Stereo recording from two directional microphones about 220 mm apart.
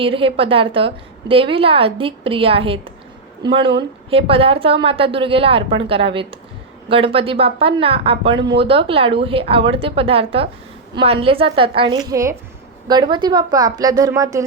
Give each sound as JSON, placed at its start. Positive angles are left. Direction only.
{"t": 0.0, "sound": "a woman's voice", "side_deg": -25}